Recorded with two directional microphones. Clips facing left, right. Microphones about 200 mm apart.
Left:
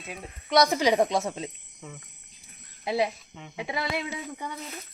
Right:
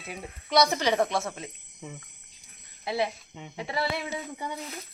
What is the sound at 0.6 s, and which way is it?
Speech, 10° left (ahead or behind).